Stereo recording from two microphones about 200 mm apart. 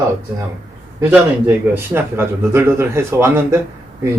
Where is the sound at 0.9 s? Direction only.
10° right (ahead or behind).